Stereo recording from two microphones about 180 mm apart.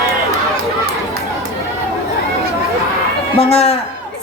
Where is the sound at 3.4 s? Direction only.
35° left (ahead or behind).